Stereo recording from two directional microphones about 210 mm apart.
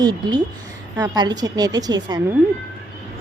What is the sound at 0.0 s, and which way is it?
A woman's voice, 20° right (ahead or behind).